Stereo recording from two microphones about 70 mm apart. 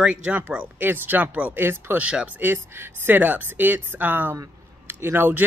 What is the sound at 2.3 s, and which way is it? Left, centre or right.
Speech, right.